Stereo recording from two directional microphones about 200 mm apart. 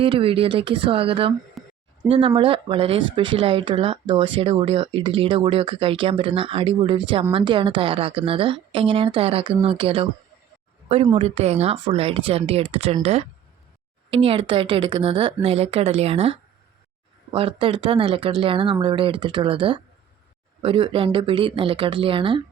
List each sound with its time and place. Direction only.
0.0 s speech: 25° right (ahead or behind)
1.6 s a sound: centre (ahead or behind)
2.0 s speech: 25° right (ahead or behind)